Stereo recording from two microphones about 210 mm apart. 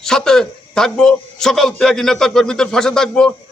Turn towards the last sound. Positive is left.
turn(degrees=5)  # may be behind; listen again after turning